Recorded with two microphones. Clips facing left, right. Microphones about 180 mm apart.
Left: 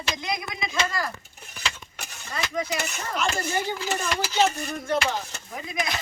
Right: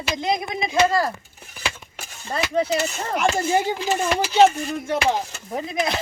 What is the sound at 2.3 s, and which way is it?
Speech, 35° right (ahead or behind).